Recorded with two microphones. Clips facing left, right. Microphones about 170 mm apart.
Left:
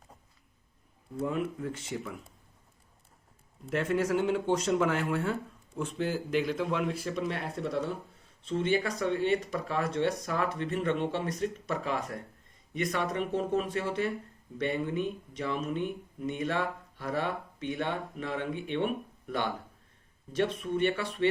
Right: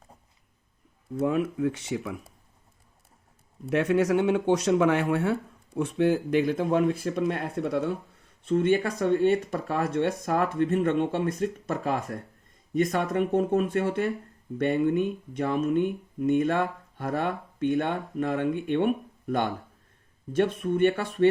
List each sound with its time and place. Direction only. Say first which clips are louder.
1.1 s speech: right 7 dB; 85° right
1.5 s speech: right 8 dB; 70° right (ahead or behind)
3.7 s speech: right 5 dB; 70° right (ahead or behind); by 21.2 s 50° right (ahead or behind)